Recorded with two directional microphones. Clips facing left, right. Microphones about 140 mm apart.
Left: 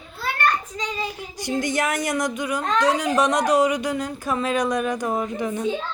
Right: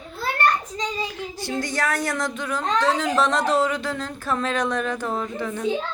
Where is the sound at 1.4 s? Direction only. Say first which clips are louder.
Left 3 dB; 20° left (ahead or behind).